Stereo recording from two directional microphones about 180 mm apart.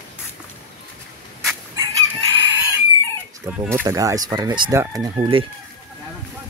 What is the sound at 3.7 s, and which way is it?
Speech, 15° right (ahead or behind).